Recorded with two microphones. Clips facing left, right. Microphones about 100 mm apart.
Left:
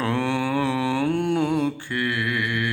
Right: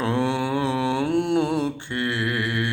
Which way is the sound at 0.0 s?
20° right (ahead or behind).